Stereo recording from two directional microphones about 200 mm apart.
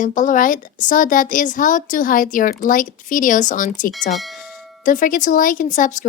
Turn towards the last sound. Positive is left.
turn(degrees=40)  # may be behind; listen again after turning